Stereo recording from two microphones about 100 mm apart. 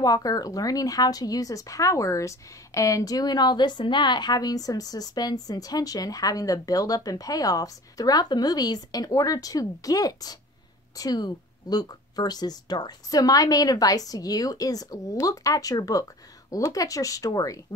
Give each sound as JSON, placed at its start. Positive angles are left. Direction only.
{"t": 0.0, "sound": "speech", "side_deg": 40}